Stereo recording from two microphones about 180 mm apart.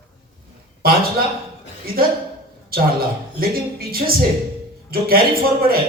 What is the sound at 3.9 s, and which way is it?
Speech, 55° right (ahead or behind).